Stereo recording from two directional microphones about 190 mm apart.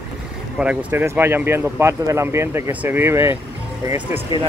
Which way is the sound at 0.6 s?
5° right (ahead or behind).